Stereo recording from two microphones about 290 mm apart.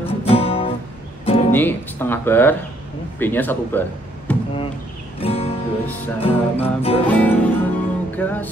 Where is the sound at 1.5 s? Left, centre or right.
Centre.